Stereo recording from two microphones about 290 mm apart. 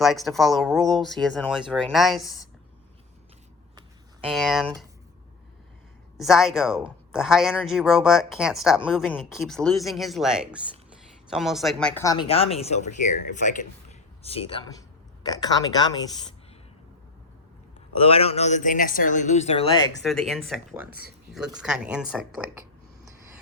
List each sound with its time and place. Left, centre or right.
0.0 s speech: centre
3.8 s a sound: centre
6.1 s speech: centre
18.0 s speech: centre
20.0 s speech: centre
20.9 s speech: right
21.3 s speech: centre